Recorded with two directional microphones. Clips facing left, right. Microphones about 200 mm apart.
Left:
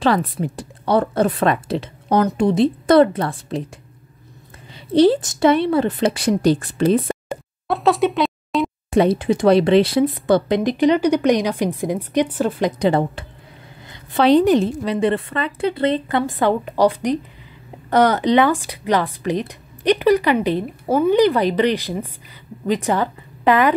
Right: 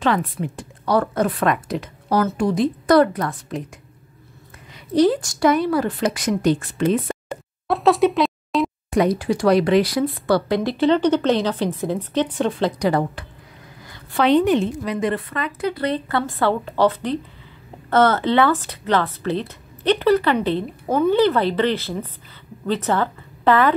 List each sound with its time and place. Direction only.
0.0 s a woman's voice: 35° left (ahead or behind)
4.7 s a woman's voice: 30° left (ahead or behind)
7.2 s plop: centre (ahead or behind)
8.9 s a woman's voice: 25° left (ahead or behind); by 12.7 s 10° left (ahead or behind)
12.7 s a woman's voice: 25° left (ahead or behind)
14.2 s a woman's voice: 35° left (ahead or behind); by 23.7 s 15° left (ahead or behind)